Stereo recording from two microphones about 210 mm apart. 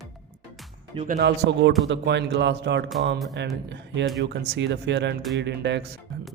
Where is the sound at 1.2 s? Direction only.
55° right (ahead or behind).